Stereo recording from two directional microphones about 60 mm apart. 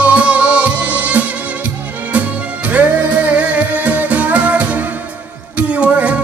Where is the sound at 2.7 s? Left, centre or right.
Right.